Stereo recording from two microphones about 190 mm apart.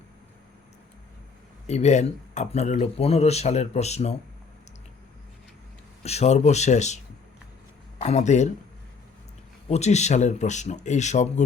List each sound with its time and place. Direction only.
1.6 s speech: 35° left (ahead or behind)
6.0 s speech: 35° left (ahead or behind)
8.0 s speech: 35° left (ahead or behind)
9.6 s speech: 35° left (ahead or behind)